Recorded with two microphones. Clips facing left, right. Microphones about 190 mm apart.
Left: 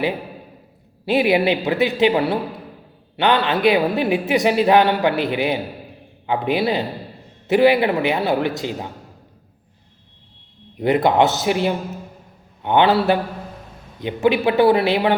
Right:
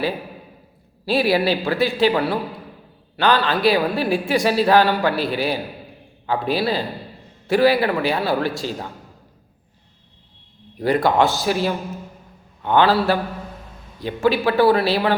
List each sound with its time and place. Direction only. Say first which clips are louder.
1.0 s speech: left 2 dB; 20° left (ahead or behind)
10.8 s speech: left 2 dB; 20° left (ahead or behind)